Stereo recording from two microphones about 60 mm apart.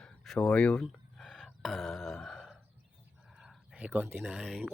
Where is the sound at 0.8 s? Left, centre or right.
Centre.